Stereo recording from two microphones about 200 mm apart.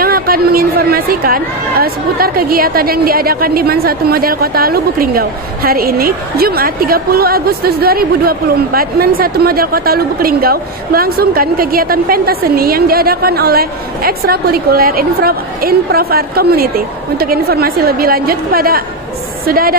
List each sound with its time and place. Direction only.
0.0 s a woman's voice: 50° right (ahead or behind)